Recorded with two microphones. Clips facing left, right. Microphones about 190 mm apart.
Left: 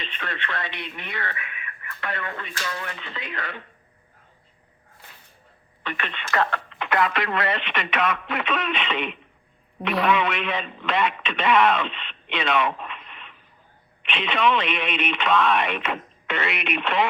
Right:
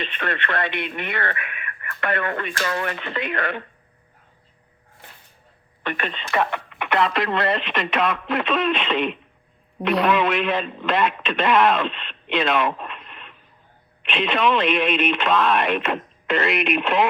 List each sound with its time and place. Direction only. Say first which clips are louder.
0.0 s speech: right 6 dB; 60° right (ahead or behind)
5.8 s speech: right 4 dB; 55° right (ahead or behind)
6.3 s speech: right 1 dB; 15° right (ahead or behind)
6.7 s radio: right 2 dB; 20° right (ahead or behind)
7.1 s speech: right 3 dB; 35° right (ahead or behind)
8.3 s a man's voice: right 5 dB; centre (ahead or behind)
16.3 s speech: right 6 dB; 40° right (ahead or behind)